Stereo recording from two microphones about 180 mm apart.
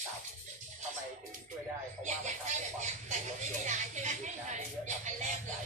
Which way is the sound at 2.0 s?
40° right (ahead or behind).